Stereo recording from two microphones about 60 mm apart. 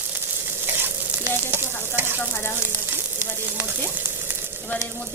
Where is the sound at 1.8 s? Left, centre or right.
Right.